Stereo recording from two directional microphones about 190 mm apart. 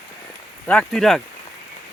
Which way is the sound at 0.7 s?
5° left (ahead or behind).